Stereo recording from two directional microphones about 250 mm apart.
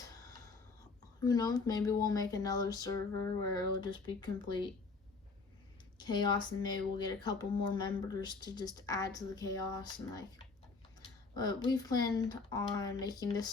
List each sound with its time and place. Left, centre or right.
1.2 s speech: centre
6.0 s speech: centre